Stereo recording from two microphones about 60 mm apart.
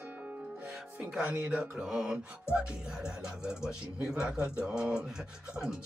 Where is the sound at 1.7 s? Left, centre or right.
Centre.